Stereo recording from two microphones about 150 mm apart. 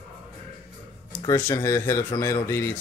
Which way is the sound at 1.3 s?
20° left (ahead or behind).